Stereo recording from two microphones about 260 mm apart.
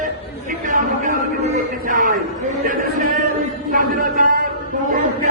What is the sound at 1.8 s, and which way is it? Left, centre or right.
Speech, right.